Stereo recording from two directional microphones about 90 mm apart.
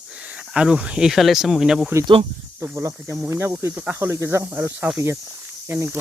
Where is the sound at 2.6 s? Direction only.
35° right (ahead or behind).